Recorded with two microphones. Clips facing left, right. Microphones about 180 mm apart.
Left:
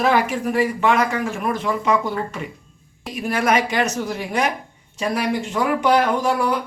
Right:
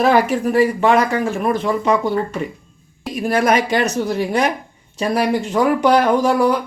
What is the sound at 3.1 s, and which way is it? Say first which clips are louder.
Speech: right 3 dB; 35° right (ahead or behind).